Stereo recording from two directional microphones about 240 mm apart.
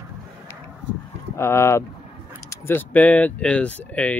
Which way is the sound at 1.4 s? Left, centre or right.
Centre.